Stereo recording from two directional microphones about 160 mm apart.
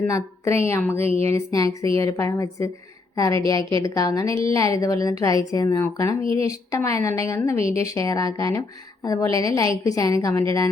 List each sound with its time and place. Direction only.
0.1 s a woman's voice: 15° left (ahead or behind)